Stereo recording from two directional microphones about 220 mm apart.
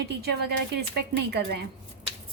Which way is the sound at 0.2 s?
50° right (ahead or behind).